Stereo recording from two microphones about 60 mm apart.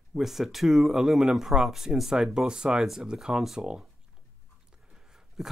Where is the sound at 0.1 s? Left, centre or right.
Centre.